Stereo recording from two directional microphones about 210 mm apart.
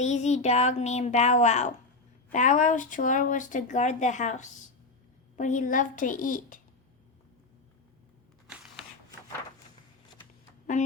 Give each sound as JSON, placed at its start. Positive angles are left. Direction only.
{"t": 0.0, "sound": "speech", "side_deg": 35}
{"t": 8.4, "sound": "a sound", "side_deg": -5}
{"t": 10.8, "sound": "speech", "side_deg": 35}